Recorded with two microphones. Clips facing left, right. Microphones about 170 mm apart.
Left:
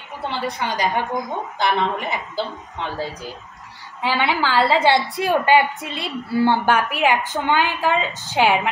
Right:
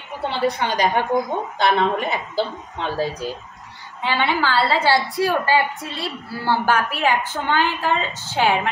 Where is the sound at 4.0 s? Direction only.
10° left (ahead or behind).